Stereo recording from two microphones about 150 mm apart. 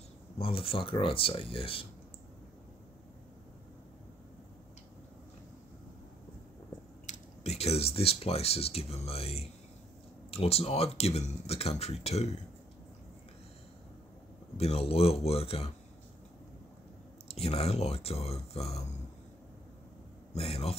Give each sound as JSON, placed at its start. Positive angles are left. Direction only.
{"t": 0.4, "sound": "speech", "side_deg": 40}
{"t": 7.1, "sound": "speech", "side_deg": 45}
{"t": 14.6, "sound": "speech", "side_deg": 40}
{"t": 17.4, "sound": "speech", "side_deg": 40}
{"t": 20.3, "sound": "speech", "side_deg": 40}